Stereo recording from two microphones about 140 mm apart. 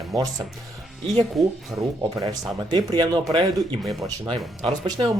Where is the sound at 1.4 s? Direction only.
Centre (ahead or behind).